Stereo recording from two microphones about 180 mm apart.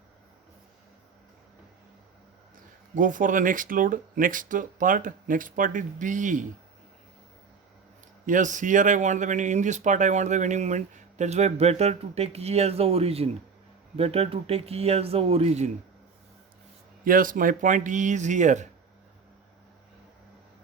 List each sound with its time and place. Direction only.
2.9 s speech: 45° right (ahead or behind)
8.3 s speech: 45° right (ahead or behind)
17.0 s speech: 50° right (ahead or behind)